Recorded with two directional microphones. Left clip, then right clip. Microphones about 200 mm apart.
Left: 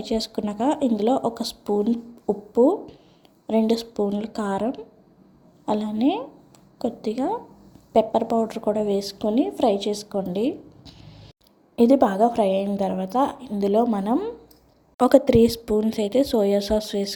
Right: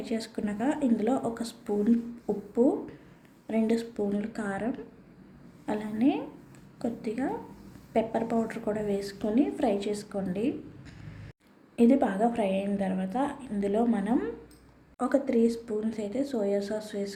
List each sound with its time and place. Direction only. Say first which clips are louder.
0.0 s a woman's voice: left 8 dB; 30° left (ahead or behind)
14.9 s a woman's voice: left 11 dB; 40° left (ahead or behind)